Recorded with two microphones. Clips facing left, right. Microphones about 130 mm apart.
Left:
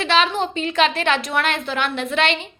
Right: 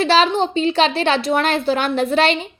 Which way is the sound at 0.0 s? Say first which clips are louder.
Right 4 dB; 35° right (ahead or behind).